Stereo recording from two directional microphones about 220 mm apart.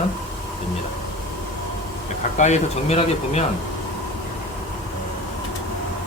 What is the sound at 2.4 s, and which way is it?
Speech, 30° left (ahead or behind).